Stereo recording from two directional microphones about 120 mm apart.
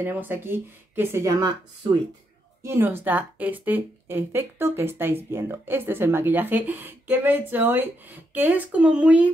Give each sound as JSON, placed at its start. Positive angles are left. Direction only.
{"t": 0.0, "sound": "speech", "side_deg": -15}
{"t": 1.8, "sound": "speech", "side_deg": -40}
{"t": 2.6, "sound": "a woman's voice", "side_deg": -20}